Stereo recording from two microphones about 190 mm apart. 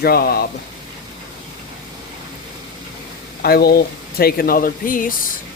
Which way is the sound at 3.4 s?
55° left (ahead or behind).